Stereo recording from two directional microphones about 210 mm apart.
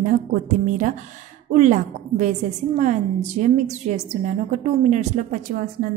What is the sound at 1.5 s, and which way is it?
A woman's voice, 35° right (ahead or behind).